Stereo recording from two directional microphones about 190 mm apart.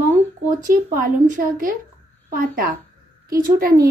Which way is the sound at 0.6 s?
45° right (ahead or behind).